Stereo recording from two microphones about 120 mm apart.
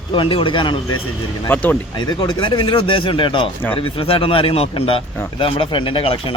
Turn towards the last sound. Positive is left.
turn(degrees=45)  # may be behind; listen again after turning